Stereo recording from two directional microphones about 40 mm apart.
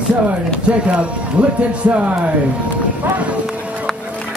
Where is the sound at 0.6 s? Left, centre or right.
Right.